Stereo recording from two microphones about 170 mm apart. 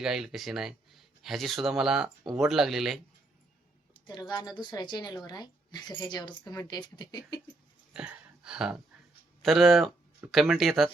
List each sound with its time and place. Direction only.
0.0 s speech: 5° right (ahead or behind)
4.0 s speech: 25° left (ahead or behind)
7.9 s speech: 5° right (ahead or behind)